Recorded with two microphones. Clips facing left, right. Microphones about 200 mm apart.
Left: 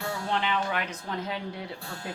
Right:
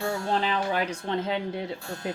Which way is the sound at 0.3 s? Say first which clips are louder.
Right 1 dB; 35° right (ahead or behind).